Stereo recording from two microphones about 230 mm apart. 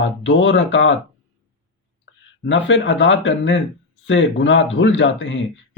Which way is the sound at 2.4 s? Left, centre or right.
Left.